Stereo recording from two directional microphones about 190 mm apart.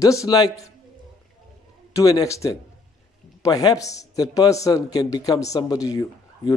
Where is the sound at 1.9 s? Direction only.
20° left (ahead or behind).